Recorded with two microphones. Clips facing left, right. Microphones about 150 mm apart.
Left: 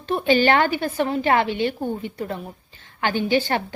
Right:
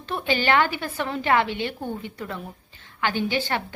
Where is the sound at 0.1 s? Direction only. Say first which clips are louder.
Left 5 dB; 45° left (ahead or behind).